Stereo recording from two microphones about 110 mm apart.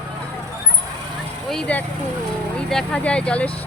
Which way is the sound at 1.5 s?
5° left (ahead or behind).